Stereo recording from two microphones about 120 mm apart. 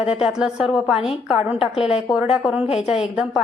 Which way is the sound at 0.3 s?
5° right (ahead or behind).